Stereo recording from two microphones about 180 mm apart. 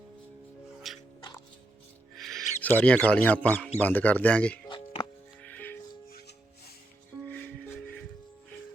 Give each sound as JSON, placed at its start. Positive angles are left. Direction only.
{"t": 0.9, "sound": "music", "side_deg": 0}
{"t": 2.1, "sound": "speech", "side_deg": 0}
{"t": 4.7, "sound": "music", "side_deg": 30}
{"t": 5.4, "sound": "music", "side_deg": 10}
{"t": 6.1, "sound": "music", "side_deg": 60}
{"t": 7.3, "sound": "music", "side_deg": 10}